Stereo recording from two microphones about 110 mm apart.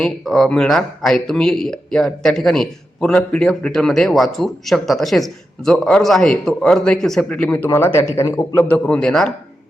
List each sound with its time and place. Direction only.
0.0 s a man's voice: 5° left (ahead or behind)